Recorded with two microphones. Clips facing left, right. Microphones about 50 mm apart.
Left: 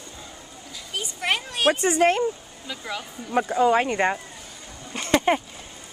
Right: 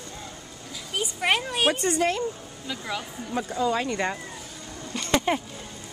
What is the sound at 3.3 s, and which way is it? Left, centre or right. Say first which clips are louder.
Speech: left 6 dB; left.